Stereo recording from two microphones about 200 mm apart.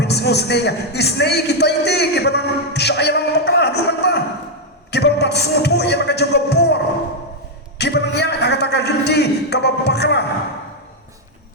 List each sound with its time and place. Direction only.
0.0 s a man's voice: 55° left (ahead or behind)
4.9 s music: 55° left (ahead or behind)
7.8 s a man's voice: 55° left (ahead or behind)